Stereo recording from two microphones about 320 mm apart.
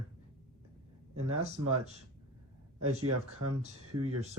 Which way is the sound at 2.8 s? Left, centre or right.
Right.